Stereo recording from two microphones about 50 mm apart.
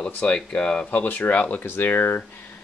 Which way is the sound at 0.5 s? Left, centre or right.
Centre.